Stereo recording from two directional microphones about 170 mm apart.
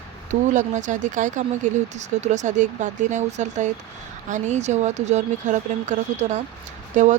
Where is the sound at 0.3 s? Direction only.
45° right (ahead or behind).